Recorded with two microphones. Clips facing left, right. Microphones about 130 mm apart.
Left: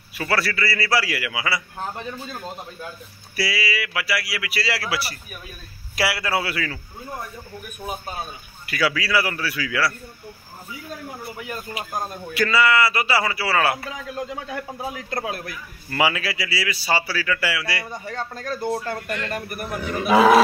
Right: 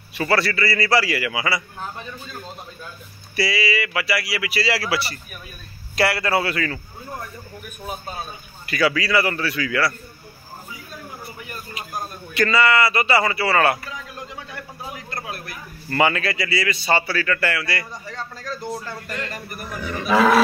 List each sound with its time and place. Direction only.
0.1 s speech: centre (ahead or behind)
3.3 s speech: centre (ahead or behind)
8.6 s speech: centre (ahead or behind)
11.4 s speech: 90° left
12.4 s speech: 5° left (ahead or behind)
15.9 s a man's voice: 5° left (ahead or behind)
17.9 s a man's voice: 60° left (ahead or behind)
19.8 s a man's voice: 10° left (ahead or behind)